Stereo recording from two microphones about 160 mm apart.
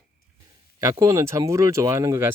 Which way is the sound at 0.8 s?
20° right (ahead or behind).